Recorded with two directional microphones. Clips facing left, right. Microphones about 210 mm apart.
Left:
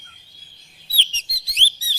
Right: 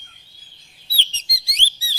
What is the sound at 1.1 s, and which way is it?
Bird, 15° right (ahead or behind).